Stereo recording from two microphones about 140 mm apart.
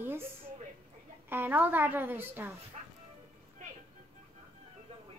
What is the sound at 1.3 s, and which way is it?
A woman's voice, 15° right (ahead or behind).